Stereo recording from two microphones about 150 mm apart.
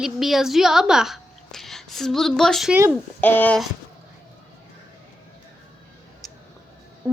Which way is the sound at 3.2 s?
15° left (ahead or behind).